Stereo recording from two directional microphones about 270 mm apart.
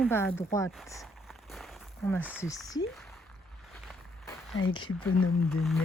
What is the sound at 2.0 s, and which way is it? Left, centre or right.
Speech, centre.